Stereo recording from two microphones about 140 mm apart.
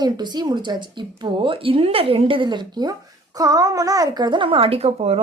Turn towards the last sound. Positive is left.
turn(degrees=-45)  # may be behind; listen again after turning